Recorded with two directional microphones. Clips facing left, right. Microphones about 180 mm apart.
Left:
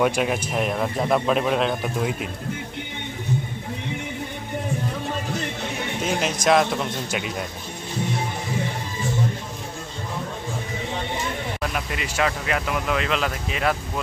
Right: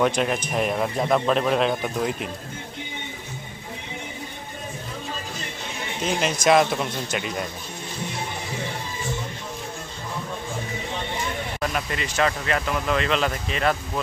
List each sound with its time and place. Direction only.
0.0 s a man's voice: 5° left (ahead or behind)
6.0 s a man's voice: centre (ahead or behind)
11.7 s a man's voice: 5° left (ahead or behind)